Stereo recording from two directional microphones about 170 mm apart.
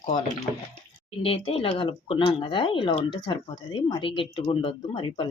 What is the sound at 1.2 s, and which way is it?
Speech, 35° left (ahead or behind).